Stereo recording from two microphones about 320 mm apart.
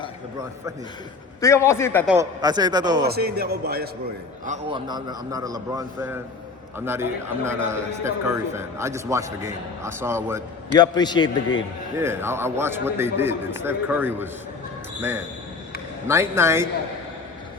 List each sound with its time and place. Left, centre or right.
1.4 s speech: centre
2.1 s a man's voice: centre
3.0 s speech: right
4.4 s a man's voice: centre
10.8 s speech: centre
11.9 s a man's voice: centre
16.0 s a man's voice: centre